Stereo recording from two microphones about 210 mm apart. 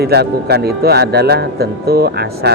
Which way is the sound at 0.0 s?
50° right (ahead or behind).